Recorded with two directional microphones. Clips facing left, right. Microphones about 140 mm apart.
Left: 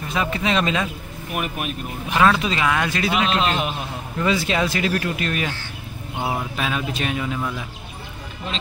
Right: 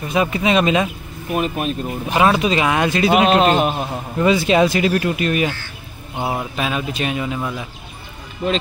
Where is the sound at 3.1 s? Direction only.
50° right (ahead or behind).